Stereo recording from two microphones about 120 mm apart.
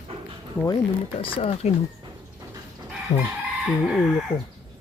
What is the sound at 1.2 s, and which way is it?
Speech, 50° left (ahead or behind).